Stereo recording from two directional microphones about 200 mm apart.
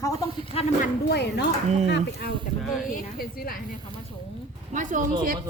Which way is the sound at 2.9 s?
45° left (ahead or behind).